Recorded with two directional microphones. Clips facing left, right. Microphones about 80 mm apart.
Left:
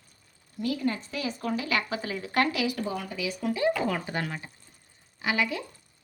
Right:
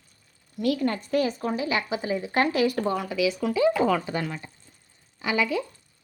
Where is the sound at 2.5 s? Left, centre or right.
Right.